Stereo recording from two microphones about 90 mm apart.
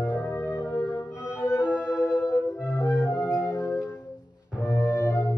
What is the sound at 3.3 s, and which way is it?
Music, 35° left (ahead or behind).